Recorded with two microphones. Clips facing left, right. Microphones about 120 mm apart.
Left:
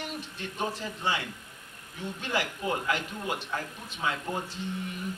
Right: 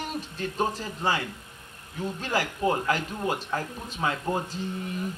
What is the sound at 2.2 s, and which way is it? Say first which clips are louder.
Speech: right 5 dB; 40° right (ahead or behind).